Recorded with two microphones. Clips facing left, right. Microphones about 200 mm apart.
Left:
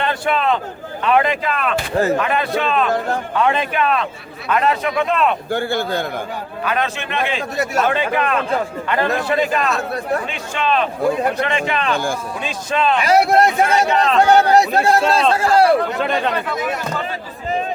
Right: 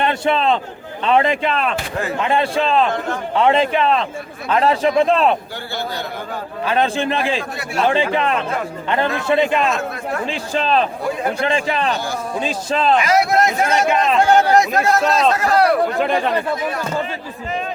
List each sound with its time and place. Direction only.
0.0 s a man's voice: 25° right (ahead or behind)
5.5 s a man's voice: 50° left (ahead or behind)
6.7 s speech: 30° right (ahead or behind)
7.5 s speech: 40° left (ahead or behind)
7.8 s a man's voice: 30° right (ahead or behind)
11.9 s a man's voice: 50° left (ahead or behind)
12.4 s speech: 30° right (ahead or behind)
13.0 s speech: 35° left (ahead or behind)
13.8 s speech: 15° right (ahead or behind)
14.2 s a man's voice: 35° left (ahead or behind)